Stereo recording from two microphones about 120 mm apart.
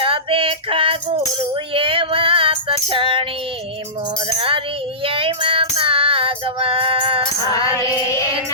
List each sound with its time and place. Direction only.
0.0 s female singing: 50° right (ahead or behind)
4.4 s music: 50° right (ahead or behind)
5.0 s child singing: 45° right (ahead or behind)
7.4 s female singing: 25° left (ahead or behind)